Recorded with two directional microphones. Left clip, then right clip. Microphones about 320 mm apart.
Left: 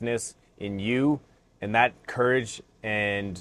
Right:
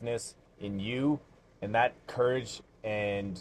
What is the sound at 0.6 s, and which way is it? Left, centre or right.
Speech, left.